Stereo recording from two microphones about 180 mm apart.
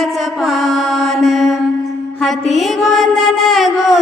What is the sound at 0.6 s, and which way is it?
Mantra, centre (ahead or behind).